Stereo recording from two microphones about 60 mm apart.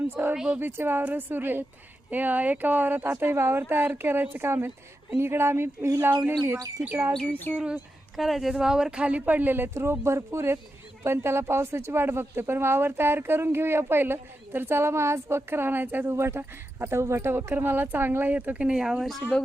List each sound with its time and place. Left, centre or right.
0.1 s speech: right
0.3 s speech: centre
0.6 s speech: right
7.5 s speech: centre
8.1 s speech: centre; by 9.6 s right
9.7 s speech: right
16.1 s speech: right; by 19.0 s centre
19.3 s speech: centre